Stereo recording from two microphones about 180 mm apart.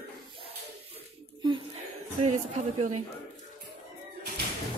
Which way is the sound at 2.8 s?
40° right (ahead or behind).